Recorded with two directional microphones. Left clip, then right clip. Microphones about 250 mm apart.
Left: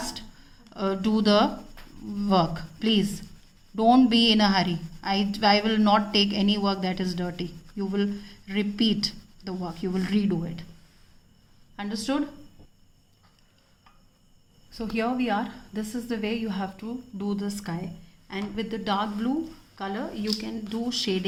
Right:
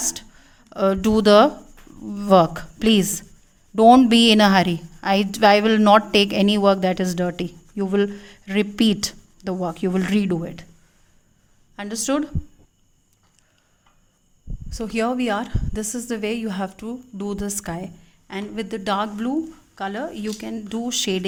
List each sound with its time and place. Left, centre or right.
0.0 s a sound: right
2.1 s a woman's voice: right
11.8 s a woman's voice: right
14.7 s a woman's voice: right